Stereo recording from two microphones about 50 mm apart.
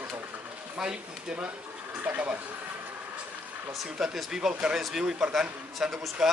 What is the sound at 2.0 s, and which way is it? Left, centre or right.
Speech, right.